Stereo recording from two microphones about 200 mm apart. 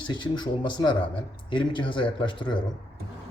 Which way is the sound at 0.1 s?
25° left (ahead or behind).